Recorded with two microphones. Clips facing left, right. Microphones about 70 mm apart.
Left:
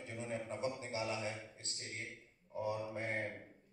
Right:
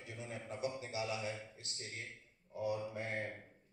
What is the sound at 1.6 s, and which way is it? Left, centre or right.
Speech, left.